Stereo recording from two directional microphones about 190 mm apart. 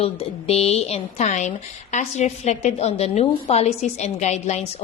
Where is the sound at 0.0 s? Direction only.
30° left (ahead or behind).